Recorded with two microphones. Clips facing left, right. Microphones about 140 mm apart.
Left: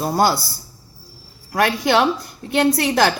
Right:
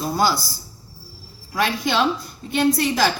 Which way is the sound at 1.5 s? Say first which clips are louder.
Left 4 dB; 60° left (ahead or behind).